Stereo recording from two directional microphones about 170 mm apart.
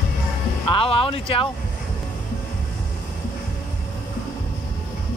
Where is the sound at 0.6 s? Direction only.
35° left (ahead or behind).